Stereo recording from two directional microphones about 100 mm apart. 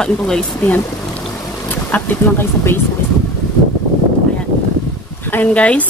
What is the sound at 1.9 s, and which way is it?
Speech, 15° left (ahead or behind).